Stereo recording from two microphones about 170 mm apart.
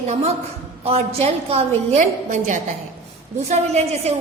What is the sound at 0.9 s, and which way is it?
A woman's voice, 35° right (ahead or behind).